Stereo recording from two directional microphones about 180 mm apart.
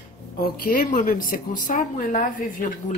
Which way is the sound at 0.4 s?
55° left (ahead or behind).